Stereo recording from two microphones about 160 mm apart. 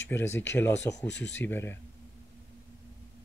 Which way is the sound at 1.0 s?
90° left.